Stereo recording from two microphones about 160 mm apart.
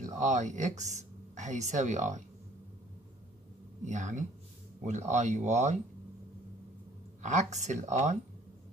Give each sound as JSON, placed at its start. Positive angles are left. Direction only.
{"t": 0.2, "sound": "speech", "side_deg": -50}
{"t": 3.8, "sound": "speech", "side_deg": -50}
{"t": 7.2, "sound": "speech", "side_deg": -45}